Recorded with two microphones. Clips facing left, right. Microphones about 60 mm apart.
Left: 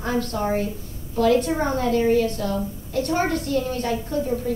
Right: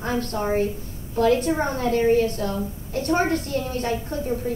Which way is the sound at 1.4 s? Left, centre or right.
Right.